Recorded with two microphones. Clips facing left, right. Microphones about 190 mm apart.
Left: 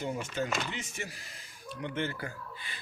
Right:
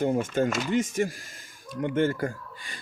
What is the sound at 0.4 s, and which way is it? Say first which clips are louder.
Speech: right 9 dB; 50° right (ahead or behind).